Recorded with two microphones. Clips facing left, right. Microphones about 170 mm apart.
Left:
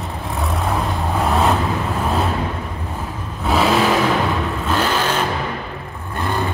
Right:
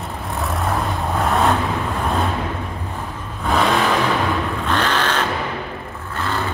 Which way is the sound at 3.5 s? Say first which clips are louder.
Left 2 dB; 5° left (ahead or behind).